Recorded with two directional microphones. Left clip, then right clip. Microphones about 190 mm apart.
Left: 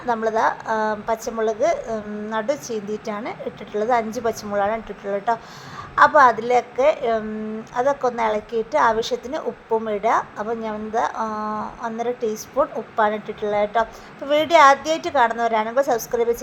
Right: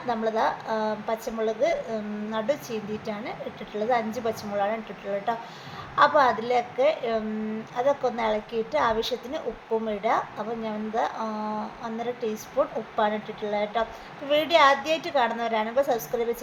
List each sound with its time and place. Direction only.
0.1 s a woman's voice: 25° left (ahead or behind)